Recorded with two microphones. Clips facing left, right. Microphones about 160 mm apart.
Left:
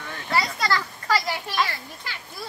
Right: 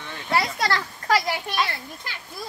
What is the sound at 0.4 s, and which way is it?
Children playing, 60° right (ahead or behind).